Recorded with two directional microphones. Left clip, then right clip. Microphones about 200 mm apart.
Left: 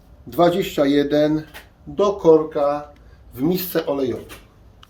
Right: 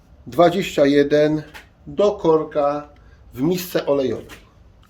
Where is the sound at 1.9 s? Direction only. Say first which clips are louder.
Left 2 dB; 30° right (ahead or behind).